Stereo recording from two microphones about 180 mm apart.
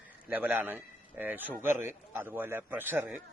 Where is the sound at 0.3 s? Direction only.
10° right (ahead or behind).